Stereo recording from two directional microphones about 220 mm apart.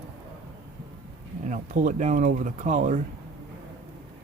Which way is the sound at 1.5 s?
35° right (ahead or behind).